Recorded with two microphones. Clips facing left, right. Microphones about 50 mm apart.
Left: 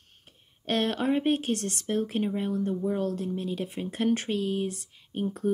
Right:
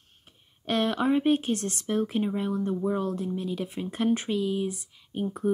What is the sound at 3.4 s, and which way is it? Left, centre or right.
Speech, left.